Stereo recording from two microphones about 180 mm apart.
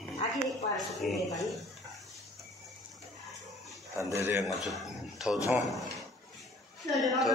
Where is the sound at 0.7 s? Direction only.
Centre (ahead or behind).